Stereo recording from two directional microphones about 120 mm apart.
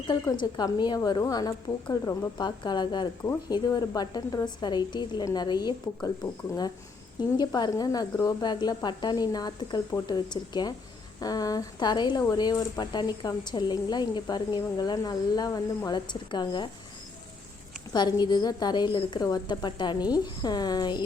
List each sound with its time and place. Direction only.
0.3 s speech: 35° left (ahead or behind)
7.2 s speech: 35° left (ahead or behind)
17.9 s speech: 35° left (ahead or behind)